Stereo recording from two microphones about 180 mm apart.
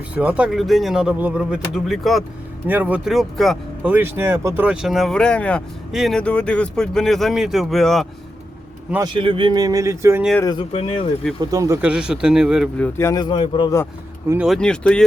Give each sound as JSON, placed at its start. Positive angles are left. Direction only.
{"t": 0.1, "sound": "speech", "side_deg": -5}
{"t": 9.0, "sound": "speech", "side_deg": -30}
{"t": 10.4, "sound": "speech", "side_deg": 25}
{"t": 11.3, "sound": "speech", "side_deg": -20}
{"t": 11.8, "sound": "a man's voice", "side_deg": -5}
{"t": 14.3, "sound": "speech", "side_deg": -5}